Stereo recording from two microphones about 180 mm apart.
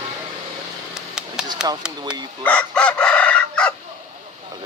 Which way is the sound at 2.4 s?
5° left (ahead or behind).